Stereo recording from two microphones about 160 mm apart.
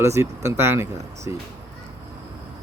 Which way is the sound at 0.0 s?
20° right (ahead or behind).